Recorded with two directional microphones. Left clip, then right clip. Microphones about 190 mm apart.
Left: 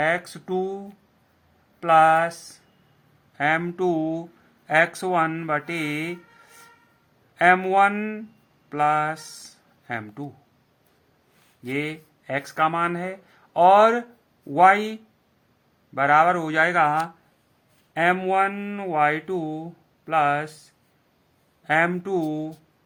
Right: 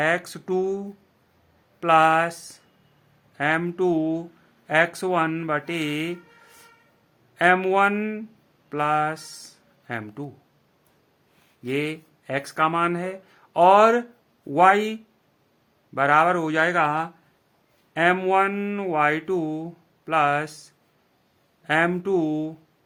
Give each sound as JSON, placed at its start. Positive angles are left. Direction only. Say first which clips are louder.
{"t": 0.0, "sound": "speech", "louder": "even", "side_deg": -20}
{"t": 11.6, "sound": "speech", "louder": "right 2 dB", "side_deg": -25}
{"t": 16.0, "sound": "speech", "louder": "left 1 dB", "side_deg": -20}